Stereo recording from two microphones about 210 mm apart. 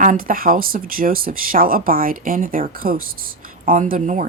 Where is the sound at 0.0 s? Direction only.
40° right (ahead or behind).